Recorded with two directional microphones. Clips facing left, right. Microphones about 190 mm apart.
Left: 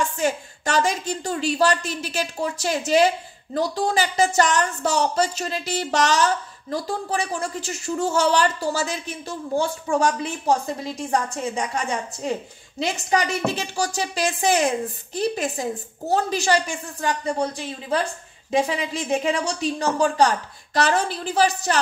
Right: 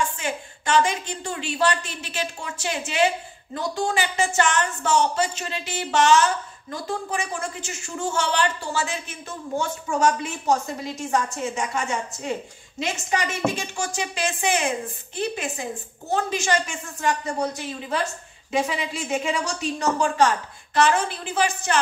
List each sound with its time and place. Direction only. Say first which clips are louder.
0.2 s a woman's voice: left 6 dB; 40° left (ahead or behind)
18.7 s a woman's voice: left 3 dB; 35° left (ahead or behind)